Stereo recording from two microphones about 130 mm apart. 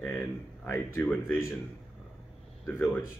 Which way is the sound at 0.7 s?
20° left (ahead or behind).